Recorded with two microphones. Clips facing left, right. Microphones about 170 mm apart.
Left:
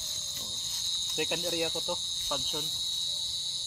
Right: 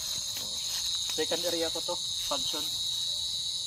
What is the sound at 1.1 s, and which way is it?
Speech, 10° left (ahead or behind).